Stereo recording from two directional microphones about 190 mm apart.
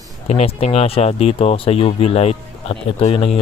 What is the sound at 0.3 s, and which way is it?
Speech, 35° left (ahead or behind).